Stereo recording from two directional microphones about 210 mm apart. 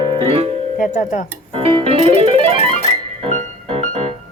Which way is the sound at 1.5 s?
25° right (ahead or behind).